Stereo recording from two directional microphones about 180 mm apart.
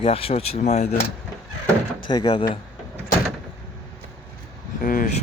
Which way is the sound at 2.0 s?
25° left (ahead or behind).